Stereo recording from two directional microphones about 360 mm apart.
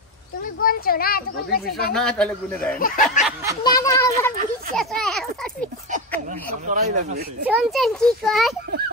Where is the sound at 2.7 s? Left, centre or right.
Left.